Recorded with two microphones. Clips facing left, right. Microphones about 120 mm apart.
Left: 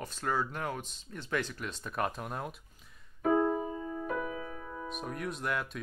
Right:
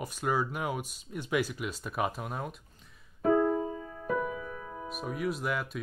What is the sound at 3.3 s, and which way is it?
Keyboard, 15° left (ahead or behind).